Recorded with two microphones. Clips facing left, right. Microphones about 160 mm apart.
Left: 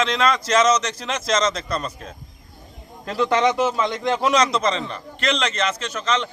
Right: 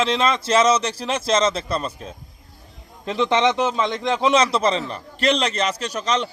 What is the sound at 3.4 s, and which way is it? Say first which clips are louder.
Speech: even; 5° left (ahead or behind).